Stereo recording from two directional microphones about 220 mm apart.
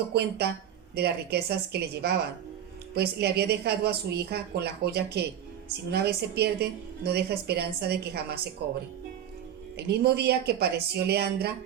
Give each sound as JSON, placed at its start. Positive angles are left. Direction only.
{"t": 0.1, "sound": "a woman's voice", "side_deg": -50}
{"t": 9.7, "sound": "a woman's voice", "side_deg": -50}